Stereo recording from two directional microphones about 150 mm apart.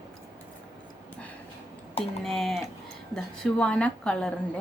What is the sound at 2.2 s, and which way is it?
A woman's voice, centre (ahead or behind).